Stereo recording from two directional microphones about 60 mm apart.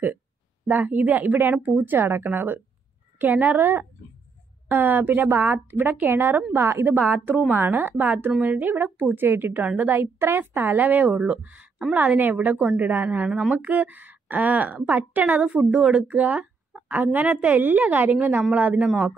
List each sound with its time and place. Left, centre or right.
0.7 s a woman's voice: right
7.0 s a woman's voice: right